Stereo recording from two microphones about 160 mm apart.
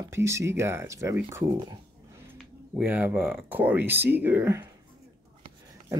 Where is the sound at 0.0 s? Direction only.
15° right (ahead or behind).